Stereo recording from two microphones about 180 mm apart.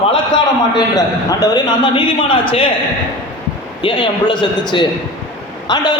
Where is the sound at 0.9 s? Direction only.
20° left (ahead or behind).